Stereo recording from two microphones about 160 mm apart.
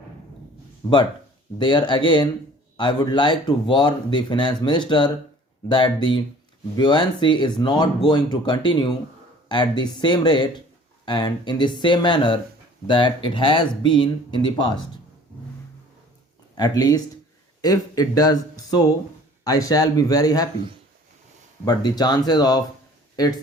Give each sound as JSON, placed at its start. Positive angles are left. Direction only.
{"t": 0.8, "sound": "speech", "side_deg": 25}
{"t": 16.6, "sound": "speech", "side_deg": 25}
{"t": 19.5, "sound": "speech", "side_deg": 25}
{"t": 21.6, "sound": "speech", "side_deg": 25}